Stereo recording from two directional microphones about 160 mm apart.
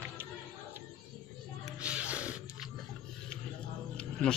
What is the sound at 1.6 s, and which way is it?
Music, 5° right (ahead or behind).